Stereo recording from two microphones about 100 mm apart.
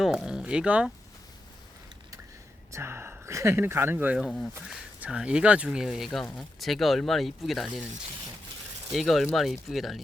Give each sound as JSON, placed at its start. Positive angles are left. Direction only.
{"t": 0.0, "sound": "speech", "side_deg": -5}
{"t": 2.7, "sound": "speech", "side_deg": -25}
{"t": 3.9, "sound": "speech", "side_deg": -15}
{"t": 4.3, "sound": "speech", "side_deg": 5}
{"t": 4.7, "sound": "speech", "side_deg": -10}
{"t": 8.9, "sound": "speech", "side_deg": 0}